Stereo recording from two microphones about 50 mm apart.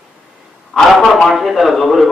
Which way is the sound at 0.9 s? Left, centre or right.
Centre.